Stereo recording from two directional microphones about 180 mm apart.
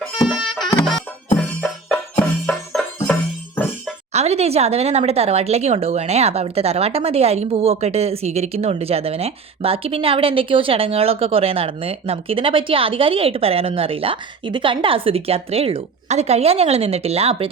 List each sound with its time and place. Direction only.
0.3 s music: 5° right (ahead or behind)
4.1 s speech: 35° right (ahead or behind)